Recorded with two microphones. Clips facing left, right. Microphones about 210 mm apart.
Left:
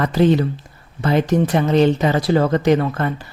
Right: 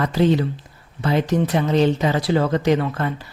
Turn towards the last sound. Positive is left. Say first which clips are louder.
# left 2 dB
turn(degrees=50)  # may be behind; listen again after turning